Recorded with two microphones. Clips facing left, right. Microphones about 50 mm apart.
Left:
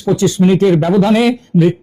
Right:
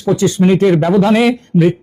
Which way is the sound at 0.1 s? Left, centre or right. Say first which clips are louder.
Even; right.